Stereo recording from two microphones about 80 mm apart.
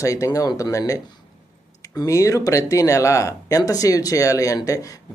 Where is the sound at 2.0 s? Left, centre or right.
Left.